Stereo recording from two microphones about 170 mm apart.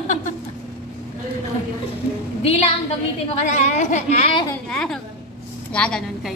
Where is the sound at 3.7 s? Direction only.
45° left (ahead or behind).